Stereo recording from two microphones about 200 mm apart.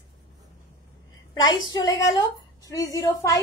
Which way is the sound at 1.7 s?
20° left (ahead or behind).